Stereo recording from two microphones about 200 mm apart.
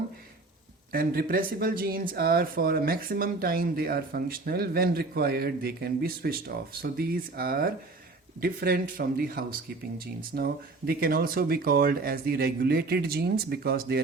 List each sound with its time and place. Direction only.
0.9 s speech: 45° right (ahead or behind)